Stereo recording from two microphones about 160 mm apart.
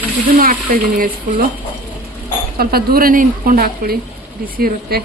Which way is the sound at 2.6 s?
65° right (ahead or behind).